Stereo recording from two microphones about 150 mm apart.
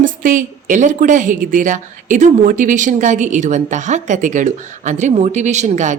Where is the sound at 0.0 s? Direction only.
65° right (ahead or behind).